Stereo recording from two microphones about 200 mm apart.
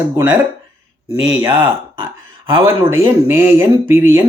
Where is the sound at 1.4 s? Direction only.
25° right (ahead or behind).